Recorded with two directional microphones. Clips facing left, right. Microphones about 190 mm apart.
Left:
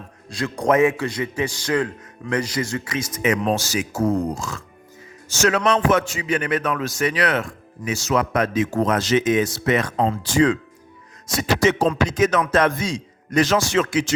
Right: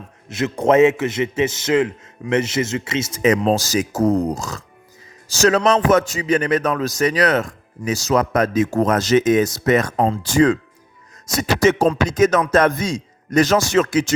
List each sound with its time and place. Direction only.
0.3 s a man's voice: 20° right (ahead or behind); by 14.1 s 40° right (ahead or behind)